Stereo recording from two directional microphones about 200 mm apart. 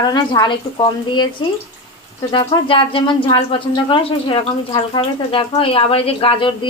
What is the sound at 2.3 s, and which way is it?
Speech, 25° left (ahead or behind).